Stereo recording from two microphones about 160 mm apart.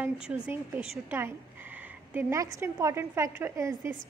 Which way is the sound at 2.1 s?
20° right (ahead or behind).